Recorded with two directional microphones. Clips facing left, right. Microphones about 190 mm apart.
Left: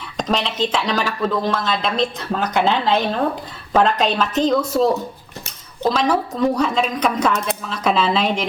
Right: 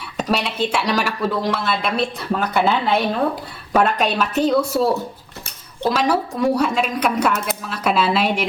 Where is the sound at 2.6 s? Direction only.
10° right (ahead or behind).